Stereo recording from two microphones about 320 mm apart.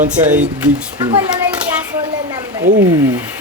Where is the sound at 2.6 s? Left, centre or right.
Right.